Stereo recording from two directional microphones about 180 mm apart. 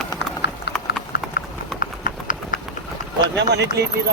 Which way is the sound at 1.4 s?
55° left (ahead or behind).